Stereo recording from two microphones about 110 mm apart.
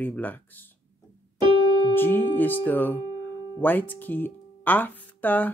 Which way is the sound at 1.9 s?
20° left (ahead or behind).